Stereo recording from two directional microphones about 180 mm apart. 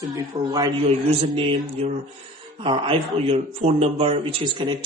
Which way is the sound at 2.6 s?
30° right (ahead or behind).